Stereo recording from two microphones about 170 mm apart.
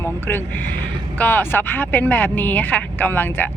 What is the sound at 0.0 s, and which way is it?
Speech, 10° left (ahead or behind).